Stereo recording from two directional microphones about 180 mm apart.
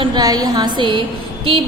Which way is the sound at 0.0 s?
25° right (ahead or behind).